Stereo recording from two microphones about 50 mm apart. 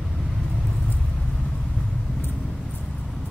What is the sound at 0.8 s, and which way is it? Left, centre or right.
Vehicle, left.